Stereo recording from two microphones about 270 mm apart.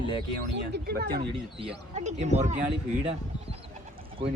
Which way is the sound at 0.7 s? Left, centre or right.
Right.